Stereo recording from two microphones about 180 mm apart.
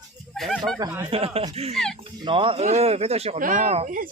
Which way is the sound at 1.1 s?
35° right (ahead or behind).